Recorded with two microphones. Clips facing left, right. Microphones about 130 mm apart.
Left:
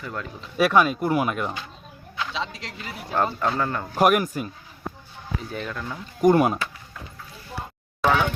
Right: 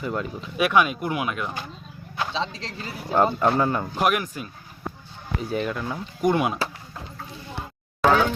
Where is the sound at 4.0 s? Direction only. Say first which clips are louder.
Left 5 dB; 45° left (ahead or behind).